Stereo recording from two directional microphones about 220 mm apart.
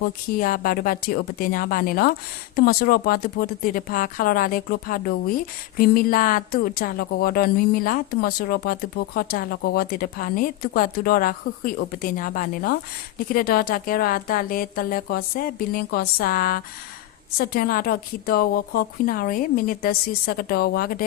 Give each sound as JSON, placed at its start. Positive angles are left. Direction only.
{"t": 0.3, "sound": "a woman's voice", "side_deg": 40}